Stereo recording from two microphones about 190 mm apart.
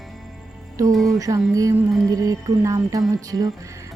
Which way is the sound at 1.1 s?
20° right (ahead or behind).